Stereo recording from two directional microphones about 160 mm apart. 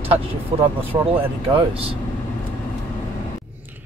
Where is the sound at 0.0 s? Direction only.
35° right (ahead or behind).